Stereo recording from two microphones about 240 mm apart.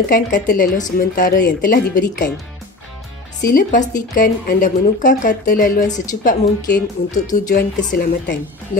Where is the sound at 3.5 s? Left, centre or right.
Left.